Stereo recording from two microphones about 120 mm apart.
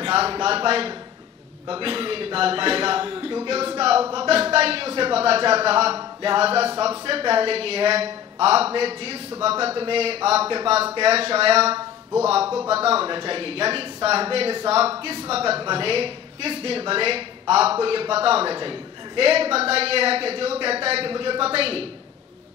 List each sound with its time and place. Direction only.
0.0 s a woman's voice: 50° right (ahead or behind)
7.3 s a woman's voice: 55° right (ahead or behind)